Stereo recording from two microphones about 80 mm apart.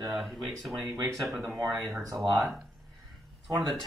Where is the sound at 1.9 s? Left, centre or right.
Right.